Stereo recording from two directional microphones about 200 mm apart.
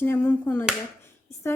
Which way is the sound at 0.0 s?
10° left (ahead or behind).